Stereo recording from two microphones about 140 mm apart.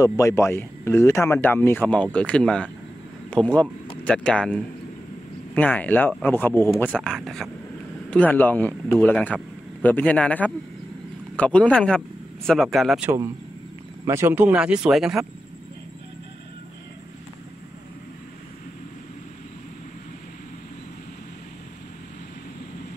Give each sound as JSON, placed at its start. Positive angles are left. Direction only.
{"t": 0.0, "sound": "a man's voice", "side_deg": 20}
{"t": 7.0, "sound": "speech", "side_deg": 5}
{"t": 13.0, "sound": "a man's voice", "side_deg": -20}